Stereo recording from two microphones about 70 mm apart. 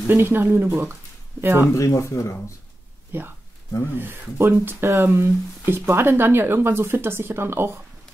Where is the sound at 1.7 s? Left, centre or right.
Left.